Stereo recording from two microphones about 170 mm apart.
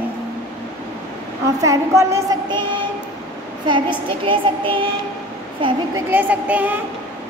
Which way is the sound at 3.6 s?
30° right (ahead or behind).